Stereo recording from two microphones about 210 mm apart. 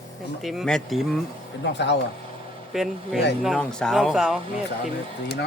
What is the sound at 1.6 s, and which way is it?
Speech, 55° left (ahead or behind).